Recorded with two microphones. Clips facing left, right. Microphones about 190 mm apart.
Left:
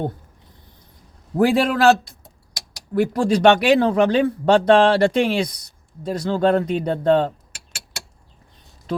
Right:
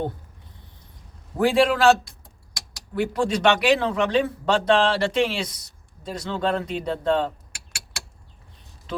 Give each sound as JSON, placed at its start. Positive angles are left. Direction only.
{"t": 1.4, "sound": "speech", "side_deg": 45}
{"t": 2.9, "sound": "speech", "side_deg": 45}